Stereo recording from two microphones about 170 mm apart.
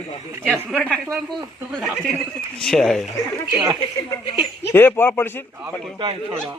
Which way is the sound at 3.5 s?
25° right (ahead or behind).